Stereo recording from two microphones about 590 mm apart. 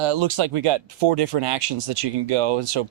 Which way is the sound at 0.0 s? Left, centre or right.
Right.